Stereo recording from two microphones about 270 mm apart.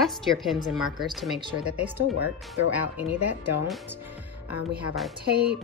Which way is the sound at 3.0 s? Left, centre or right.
Left.